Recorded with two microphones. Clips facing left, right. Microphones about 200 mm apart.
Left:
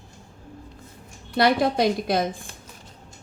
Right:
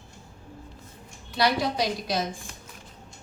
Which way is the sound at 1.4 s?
55° left (ahead or behind).